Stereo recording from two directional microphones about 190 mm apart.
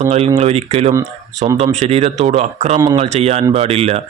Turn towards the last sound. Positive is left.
turn(degrees=-30)  # may be behind; listen again after turning